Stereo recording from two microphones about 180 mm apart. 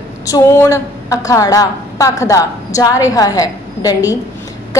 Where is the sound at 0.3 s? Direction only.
15° left (ahead or behind).